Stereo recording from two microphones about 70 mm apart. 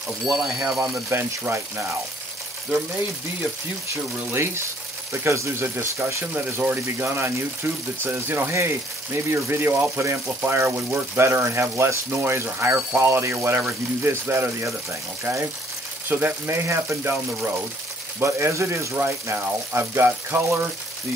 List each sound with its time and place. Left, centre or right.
0.3 s speech: centre
1.1 s speech: right
4.3 s speech: right
6.3 s speech: right
16.1 s speech: right
16.4 s speech: right
18.9 s speech: right